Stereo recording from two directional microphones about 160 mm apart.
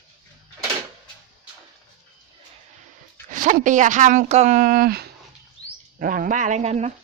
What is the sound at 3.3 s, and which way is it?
Speech, 55° right (ahead or behind).